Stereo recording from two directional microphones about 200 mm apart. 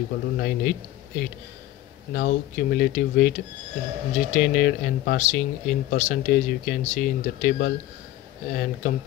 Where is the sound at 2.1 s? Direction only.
50° left (ahead or behind).